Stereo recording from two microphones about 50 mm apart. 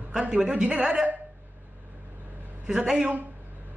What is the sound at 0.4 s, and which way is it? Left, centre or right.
Speech, centre.